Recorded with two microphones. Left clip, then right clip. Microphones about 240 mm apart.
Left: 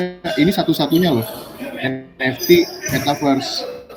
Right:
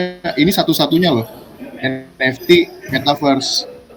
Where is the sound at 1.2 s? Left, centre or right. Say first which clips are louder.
Left 4 dB; left.